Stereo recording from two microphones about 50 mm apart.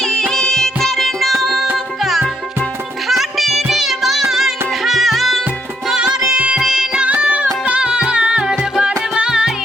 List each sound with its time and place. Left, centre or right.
0.0 s music: centre
6.0 s music: centre
6.6 s music: centre
7.1 s music: right